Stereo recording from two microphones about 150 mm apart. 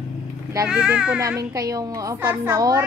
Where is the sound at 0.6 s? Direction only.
10° right (ahead or behind).